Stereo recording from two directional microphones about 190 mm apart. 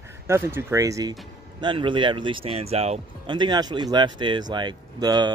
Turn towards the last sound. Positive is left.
turn(degrees=-20)  # may be behind; listen again after turning